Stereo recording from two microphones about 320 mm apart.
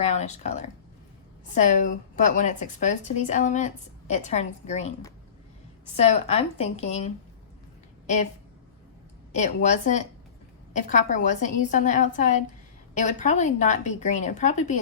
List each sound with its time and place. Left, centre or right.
0.0 s a woman's voice: left
6.0 s a woman's voice: centre
9.3 s a woman's voice: left